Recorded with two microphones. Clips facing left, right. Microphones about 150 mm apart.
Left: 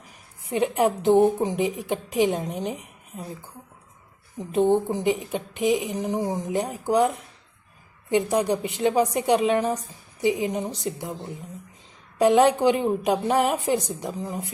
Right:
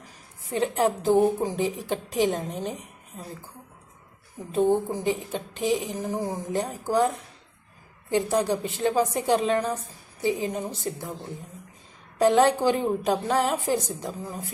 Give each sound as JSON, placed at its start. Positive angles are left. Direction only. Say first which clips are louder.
{"t": 0.4, "sound": "a woman's voice", "louder": "left 2 dB", "side_deg": 15}
{"t": 4.4, "sound": "a woman's voice", "louder": "left 2 dB", "side_deg": 20}